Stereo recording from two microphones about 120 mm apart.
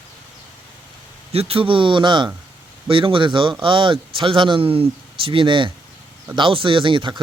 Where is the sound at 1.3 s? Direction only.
55° right (ahead or behind).